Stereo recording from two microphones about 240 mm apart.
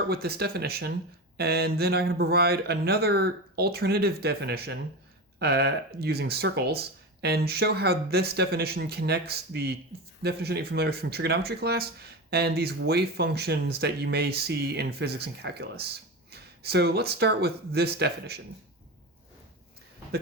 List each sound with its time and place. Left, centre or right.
0.1 s speech: right